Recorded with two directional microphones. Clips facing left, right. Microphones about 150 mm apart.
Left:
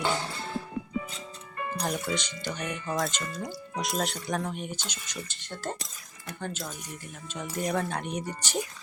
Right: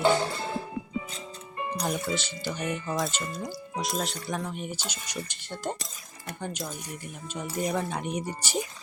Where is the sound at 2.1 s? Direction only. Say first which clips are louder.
Right 1 dB; 5° right (ahead or behind).